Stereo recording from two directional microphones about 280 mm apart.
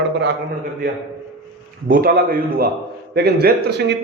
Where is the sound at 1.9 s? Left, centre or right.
Right.